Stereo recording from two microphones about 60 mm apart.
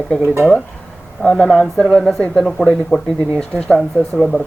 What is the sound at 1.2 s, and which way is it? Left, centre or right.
Speech, centre.